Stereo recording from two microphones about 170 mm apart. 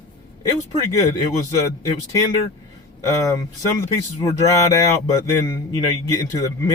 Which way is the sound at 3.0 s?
20° left (ahead or behind).